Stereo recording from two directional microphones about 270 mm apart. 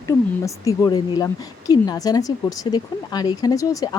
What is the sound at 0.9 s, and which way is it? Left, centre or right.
Speech, centre.